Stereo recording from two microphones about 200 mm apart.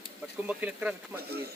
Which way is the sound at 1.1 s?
50° right (ahead or behind).